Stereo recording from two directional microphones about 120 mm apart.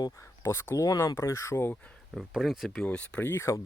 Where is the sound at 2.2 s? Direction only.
5° right (ahead or behind).